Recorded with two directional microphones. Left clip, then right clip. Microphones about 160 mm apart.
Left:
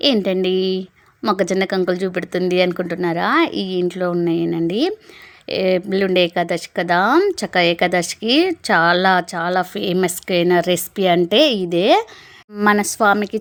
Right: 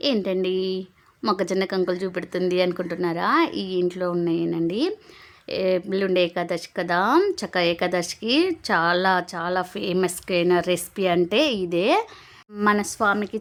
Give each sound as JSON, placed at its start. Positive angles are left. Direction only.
{"t": 0.0, "sound": "a woman's voice", "side_deg": 25}